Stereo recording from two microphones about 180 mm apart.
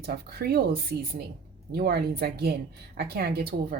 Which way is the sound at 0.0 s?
60° right (ahead or behind).